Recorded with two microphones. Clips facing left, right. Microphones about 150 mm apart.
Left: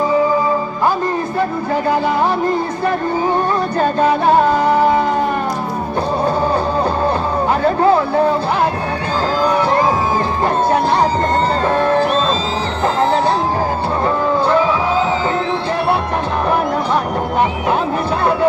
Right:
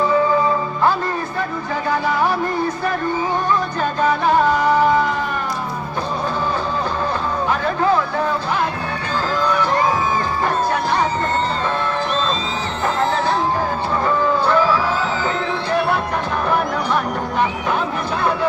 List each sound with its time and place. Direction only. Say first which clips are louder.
7.6 s speech: left 6 dB; 35° left (ahead or behind)
10.7 s a sound: left 5 dB; 35° left (ahead or behind)
11.6 s music: left 7 dB; 40° left (ahead or behind)
14.4 s music: left 2 dB; 20° left (ahead or behind)